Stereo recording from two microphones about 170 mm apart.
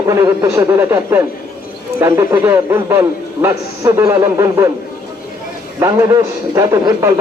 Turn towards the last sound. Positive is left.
turn(degrees=-20)  # may be behind; listen again after turning